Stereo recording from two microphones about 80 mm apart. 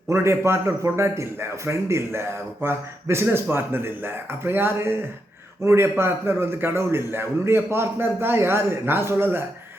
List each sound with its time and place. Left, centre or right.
0.1 s a man's voice: right